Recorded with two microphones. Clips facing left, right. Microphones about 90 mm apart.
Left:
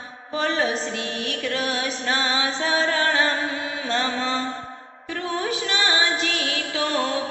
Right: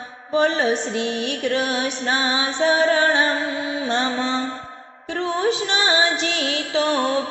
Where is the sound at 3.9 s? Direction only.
25° right (ahead or behind).